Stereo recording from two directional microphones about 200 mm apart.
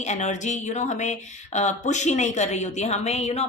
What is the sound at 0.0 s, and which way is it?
A woman's voice, 35° left (ahead or behind).